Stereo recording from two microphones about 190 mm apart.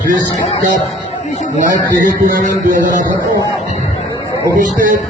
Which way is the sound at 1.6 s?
45° right (ahead or behind).